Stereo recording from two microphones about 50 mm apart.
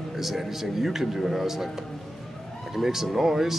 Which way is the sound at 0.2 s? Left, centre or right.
Centre.